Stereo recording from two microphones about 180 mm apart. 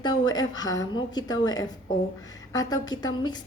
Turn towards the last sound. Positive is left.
turn(degrees=25)  # may be behind; listen again after turning